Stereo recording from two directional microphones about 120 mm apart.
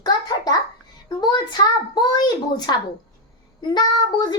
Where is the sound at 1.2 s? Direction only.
35° left (ahead or behind).